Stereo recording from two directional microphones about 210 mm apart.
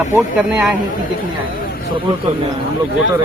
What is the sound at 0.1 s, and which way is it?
Speech, 5° right (ahead or behind).